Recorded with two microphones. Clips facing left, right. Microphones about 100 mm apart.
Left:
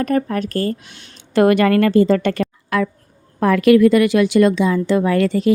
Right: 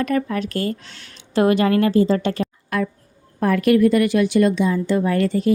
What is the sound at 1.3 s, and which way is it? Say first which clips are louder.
Speech: left 3 dB; 60° left (ahead or behind).